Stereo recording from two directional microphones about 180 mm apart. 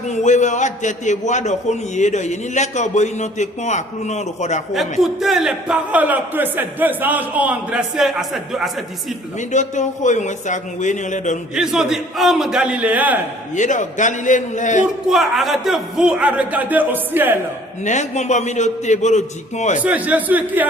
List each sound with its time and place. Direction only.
0.1 s a man's voice: 40° left (ahead or behind)
4.7 s a man's voice: centre (ahead or behind)
9.4 s speech: 40° left (ahead or behind)
11.5 s a man's voice: 5° right (ahead or behind)
13.6 s speech: 45° left (ahead or behind)
15.1 s a man's voice: centre (ahead or behind)
17.8 s a man's voice: 40° left (ahead or behind)
19.8 s a man's voice: 10° right (ahead or behind)